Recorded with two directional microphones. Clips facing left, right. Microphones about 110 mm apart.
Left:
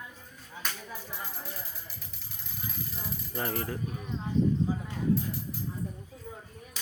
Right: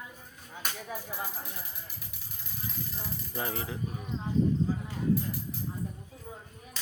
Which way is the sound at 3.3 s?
5° right (ahead or behind).